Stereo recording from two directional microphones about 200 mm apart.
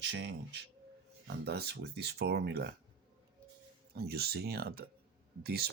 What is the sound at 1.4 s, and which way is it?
Speech, 55° right (ahead or behind).